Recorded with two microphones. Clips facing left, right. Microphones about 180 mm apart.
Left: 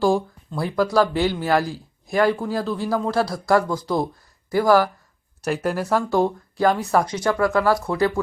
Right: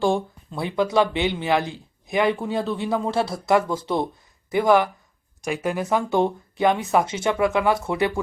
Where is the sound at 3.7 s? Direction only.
25° right (ahead or behind).